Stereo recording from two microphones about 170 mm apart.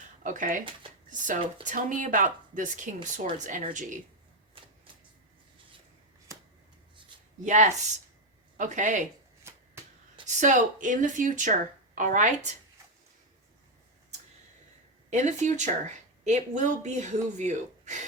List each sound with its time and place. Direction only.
0.2 s speech: 50° right (ahead or behind)
1.6 s speech: 50° right (ahead or behind)
7.4 s speech: 45° right (ahead or behind)
9.4 s finger snapping: 15° right (ahead or behind)
10.2 s speech: 45° right (ahead or behind)
15.1 s speech: 45° right (ahead or behind)